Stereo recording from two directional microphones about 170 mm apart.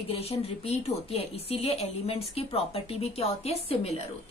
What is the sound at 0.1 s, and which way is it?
A woman's voice, 35° left (ahead or behind).